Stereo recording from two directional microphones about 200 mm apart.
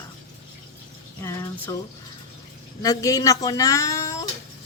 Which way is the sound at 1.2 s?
15° left (ahead or behind).